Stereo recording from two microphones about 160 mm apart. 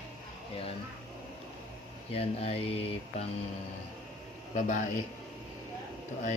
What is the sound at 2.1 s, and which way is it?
Mantra, 40° left (ahead or behind).